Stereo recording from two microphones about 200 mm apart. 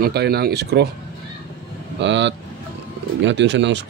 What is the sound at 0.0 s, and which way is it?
Speech, 55° right (ahead or behind).